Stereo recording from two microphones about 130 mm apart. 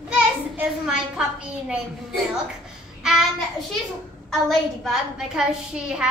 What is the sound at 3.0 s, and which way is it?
Child singing, 5° right (ahead or behind).